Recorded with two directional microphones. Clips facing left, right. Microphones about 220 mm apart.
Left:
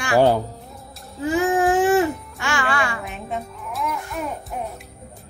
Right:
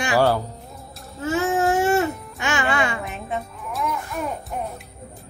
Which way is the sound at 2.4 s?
20° right (ahead or behind).